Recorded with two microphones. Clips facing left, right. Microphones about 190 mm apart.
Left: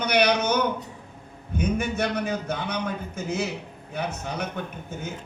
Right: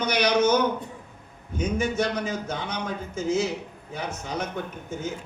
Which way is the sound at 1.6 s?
60° left (ahead or behind).